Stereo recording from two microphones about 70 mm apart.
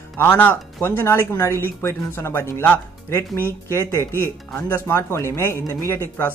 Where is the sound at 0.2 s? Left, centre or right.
Left.